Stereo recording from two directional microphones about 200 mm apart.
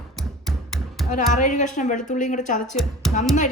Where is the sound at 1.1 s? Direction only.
40° left (ahead or behind).